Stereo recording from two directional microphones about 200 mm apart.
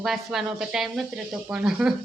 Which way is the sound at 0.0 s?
Centre (ahead or behind).